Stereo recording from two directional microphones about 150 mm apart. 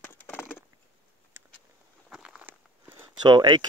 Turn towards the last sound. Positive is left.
turn(degrees=-30)  # may be behind; listen again after turning